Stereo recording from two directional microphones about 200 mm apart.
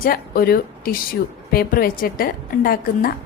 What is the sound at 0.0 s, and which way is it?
A woman's voice, 45° left (ahead or behind).